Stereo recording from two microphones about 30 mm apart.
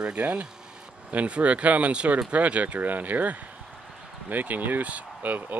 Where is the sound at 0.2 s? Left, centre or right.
Right.